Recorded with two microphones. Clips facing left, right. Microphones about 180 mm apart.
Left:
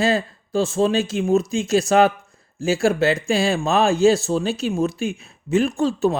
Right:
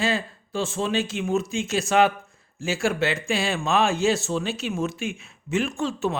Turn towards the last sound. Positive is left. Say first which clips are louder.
# left 7 dB
turn(degrees=35)  # may be behind; listen again after turning